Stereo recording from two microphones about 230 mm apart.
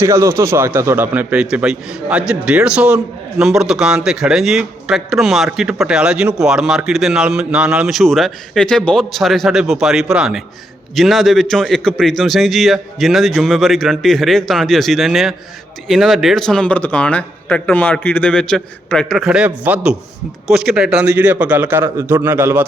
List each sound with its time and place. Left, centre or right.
0.0 s a man's voice: centre